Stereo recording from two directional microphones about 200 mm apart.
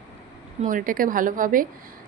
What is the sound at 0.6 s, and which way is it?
A woman's voice, 40° right (ahead or behind).